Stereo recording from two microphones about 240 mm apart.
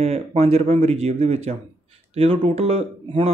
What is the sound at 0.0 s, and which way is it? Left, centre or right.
Speech, right.